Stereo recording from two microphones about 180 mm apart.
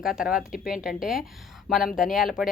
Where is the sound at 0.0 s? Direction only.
Centre (ahead or behind).